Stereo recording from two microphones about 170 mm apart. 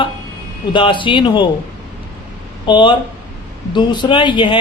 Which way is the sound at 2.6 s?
30° left (ahead or behind).